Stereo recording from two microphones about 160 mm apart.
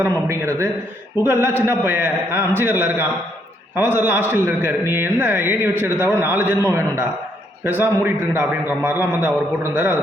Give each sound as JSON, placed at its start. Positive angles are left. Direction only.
{"t": 0.0, "sound": "a man's voice", "side_deg": -15}